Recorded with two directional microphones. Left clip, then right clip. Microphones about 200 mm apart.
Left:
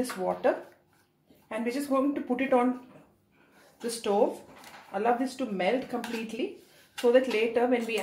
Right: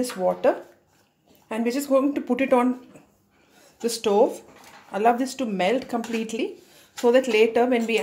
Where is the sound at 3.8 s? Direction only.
50° right (ahead or behind).